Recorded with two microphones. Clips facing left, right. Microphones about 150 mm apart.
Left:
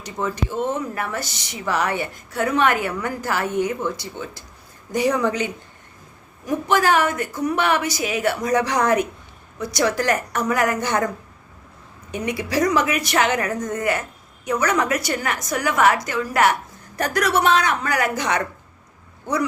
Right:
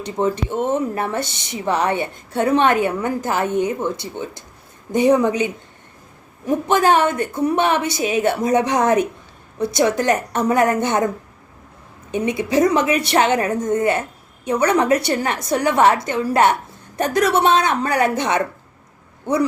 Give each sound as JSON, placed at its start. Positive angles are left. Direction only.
{"t": 0.0, "sound": "a woman's voice", "side_deg": -25}
{"t": 12.1, "sound": "a woman's voice", "side_deg": -20}